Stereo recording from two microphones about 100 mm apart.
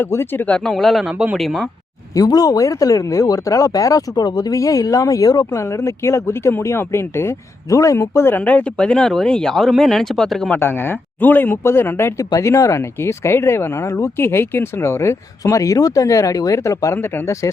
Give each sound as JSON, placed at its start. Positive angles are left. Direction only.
{"t": 0.0, "sound": "speech", "side_deg": 20}
{"t": 2.1, "sound": "speech", "side_deg": 40}
{"t": 10.5, "sound": "speech", "side_deg": 20}